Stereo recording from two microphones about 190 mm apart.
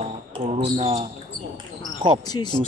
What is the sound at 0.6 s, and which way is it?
Speech, 35° right (ahead or behind).